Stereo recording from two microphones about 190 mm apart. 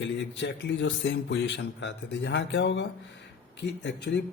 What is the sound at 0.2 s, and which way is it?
A man's voice, 70° left (ahead or behind).